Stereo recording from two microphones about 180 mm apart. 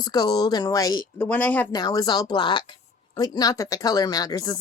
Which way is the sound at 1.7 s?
20° left (ahead or behind).